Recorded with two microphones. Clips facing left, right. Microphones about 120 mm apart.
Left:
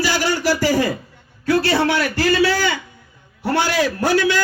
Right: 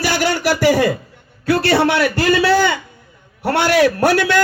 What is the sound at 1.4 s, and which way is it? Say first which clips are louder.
A man's voice: right 2 dB; 70° right (ahead or behind).